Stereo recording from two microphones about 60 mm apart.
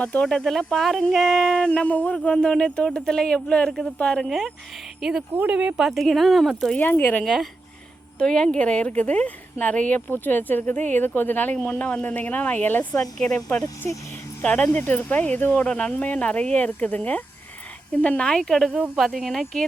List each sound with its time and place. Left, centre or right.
0.0 s speech: centre
2.1 s speech: centre
4.2 s speech: centre
5.5 s speech: centre
5.8 s speech: centre
6.7 s speech: left
8.2 s speech: centre; by 12.9 s left
13.0 s speech: centre
14.4 s speech: centre